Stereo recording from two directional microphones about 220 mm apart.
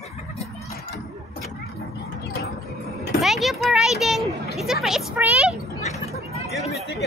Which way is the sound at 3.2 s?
Centre (ahead or behind).